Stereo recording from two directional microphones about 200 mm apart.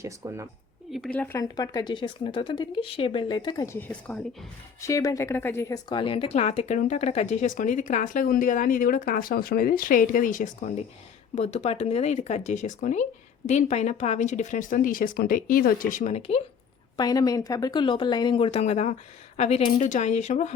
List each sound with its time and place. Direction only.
0.0 s a woman's voice: 15° right (ahead or behind)
0.9 s speech: centre (ahead or behind); by 16.4 s 30° left (ahead or behind)
17.0 s speech: 20° left (ahead or behind); by 20.5 s 35° left (ahead or behind)